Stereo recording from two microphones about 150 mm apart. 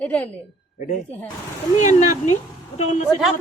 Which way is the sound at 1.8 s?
55° left (ahead or behind).